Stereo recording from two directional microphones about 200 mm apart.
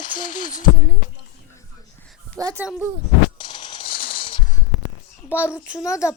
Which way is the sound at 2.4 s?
15° right (ahead or behind).